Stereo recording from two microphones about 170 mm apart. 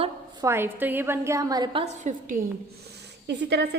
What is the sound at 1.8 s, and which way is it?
Speech, 45° right (ahead or behind).